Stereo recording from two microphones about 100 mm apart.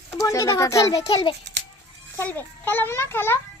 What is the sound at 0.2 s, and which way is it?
Speech, 35° left (ahead or behind).